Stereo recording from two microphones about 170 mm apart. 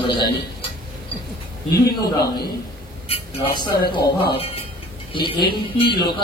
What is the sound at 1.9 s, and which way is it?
Speech, 65° left (ahead or behind).